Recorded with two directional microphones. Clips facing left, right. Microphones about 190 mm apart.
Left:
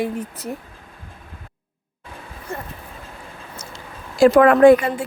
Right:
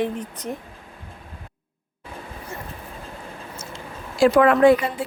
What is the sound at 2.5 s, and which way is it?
Vehicle, 50° left (ahead or behind).